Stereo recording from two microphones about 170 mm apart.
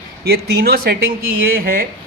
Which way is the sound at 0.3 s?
65° right (ahead or behind).